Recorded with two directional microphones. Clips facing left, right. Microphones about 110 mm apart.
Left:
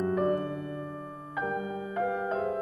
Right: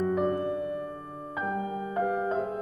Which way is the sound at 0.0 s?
5° right (ahead or behind).